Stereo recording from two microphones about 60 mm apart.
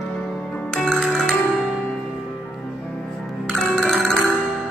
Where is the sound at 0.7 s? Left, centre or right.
Centre.